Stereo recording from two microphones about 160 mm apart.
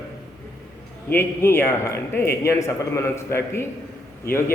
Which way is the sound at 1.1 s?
15° left (ahead or behind).